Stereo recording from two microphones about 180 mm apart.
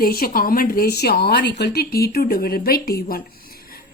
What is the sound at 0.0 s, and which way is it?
Speech, 55° left (ahead or behind).